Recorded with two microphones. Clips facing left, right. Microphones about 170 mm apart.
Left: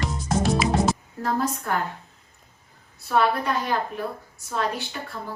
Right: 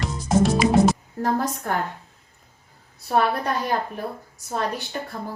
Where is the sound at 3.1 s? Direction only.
45° right (ahead or behind).